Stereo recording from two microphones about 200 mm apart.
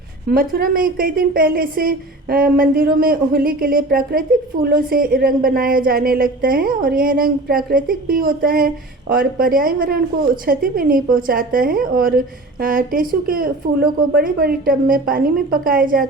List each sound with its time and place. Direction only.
0.3 s a woman's voice: 45° right (ahead or behind)